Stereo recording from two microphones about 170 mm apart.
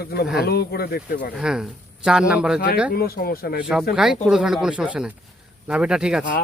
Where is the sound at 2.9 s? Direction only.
65° left (ahead or behind).